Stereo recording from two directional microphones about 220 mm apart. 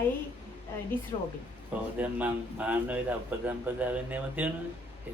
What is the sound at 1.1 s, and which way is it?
Speech, 20° left (ahead or behind).